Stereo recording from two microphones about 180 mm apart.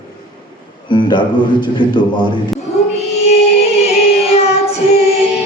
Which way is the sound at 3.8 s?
35° left (ahead or behind).